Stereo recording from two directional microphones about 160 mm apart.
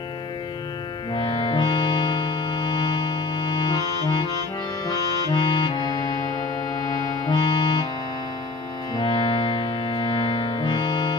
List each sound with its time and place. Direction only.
1.1 s music: 35° left (ahead or behind)
5.3 s music: 30° left (ahead or behind)
7.2 s music: 30° left (ahead or behind)
8.9 s music: 35° left (ahead or behind)